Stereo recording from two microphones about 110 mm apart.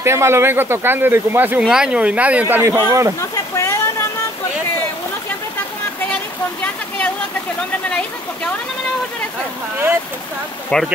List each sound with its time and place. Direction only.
0.0 s speech: 25° right (ahead or behind)
1.6 s speech: 5° right (ahead or behind)
2.4 s speech: 25° right (ahead or behind)
3.2 s a sound: 30° left (ahead or behind)
10.7 s speech: 10° left (ahead or behind)